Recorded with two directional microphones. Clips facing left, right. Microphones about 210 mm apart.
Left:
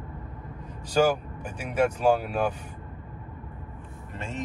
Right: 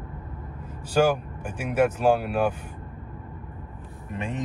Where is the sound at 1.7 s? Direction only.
10° right (ahead or behind).